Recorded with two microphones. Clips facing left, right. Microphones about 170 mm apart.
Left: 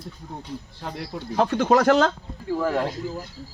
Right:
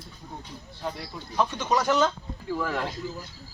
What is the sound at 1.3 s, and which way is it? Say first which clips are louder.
Speech: left 6 dB; 90° left.